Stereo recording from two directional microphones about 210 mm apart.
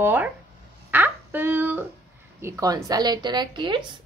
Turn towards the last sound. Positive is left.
turn(degrees=-20)  # may be behind; listen again after turning